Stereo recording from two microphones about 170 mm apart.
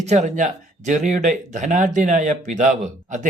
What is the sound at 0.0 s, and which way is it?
Speech, 40° right (ahead or behind).